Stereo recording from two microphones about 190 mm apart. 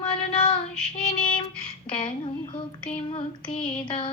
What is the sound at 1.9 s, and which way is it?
Female singing, 25° left (ahead or behind).